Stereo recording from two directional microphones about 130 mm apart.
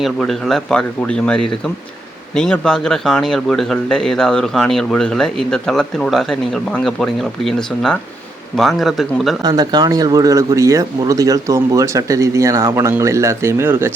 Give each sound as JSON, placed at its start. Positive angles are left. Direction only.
{"t": 0.0, "sound": "speech", "side_deg": 5}
{"t": 9.4, "sound": "speech", "side_deg": -30}